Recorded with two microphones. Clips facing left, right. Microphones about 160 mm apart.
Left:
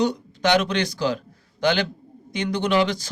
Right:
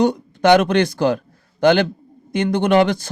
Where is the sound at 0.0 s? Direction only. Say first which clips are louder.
Right 6 dB; 55° right (ahead or behind).